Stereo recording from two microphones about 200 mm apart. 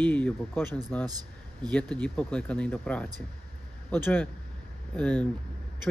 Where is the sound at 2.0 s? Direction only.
5° left (ahead or behind).